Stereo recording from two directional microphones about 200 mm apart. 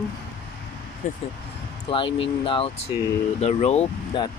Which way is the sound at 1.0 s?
40° left (ahead or behind).